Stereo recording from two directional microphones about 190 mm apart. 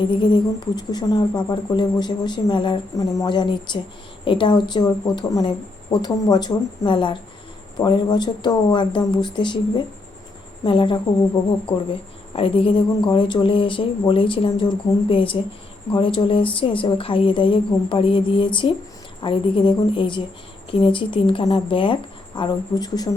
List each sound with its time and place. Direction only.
0.0 s a woman's voice: 25° left (ahead or behind)